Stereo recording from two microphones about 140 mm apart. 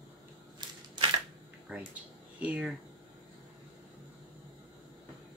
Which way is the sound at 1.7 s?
5° right (ahead or behind).